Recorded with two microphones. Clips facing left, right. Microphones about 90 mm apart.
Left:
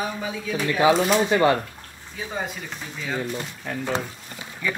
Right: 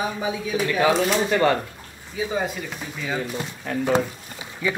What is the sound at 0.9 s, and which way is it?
Speech, centre (ahead or behind).